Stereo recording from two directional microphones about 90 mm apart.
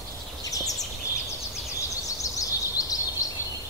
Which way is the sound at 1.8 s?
40° left (ahead or behind).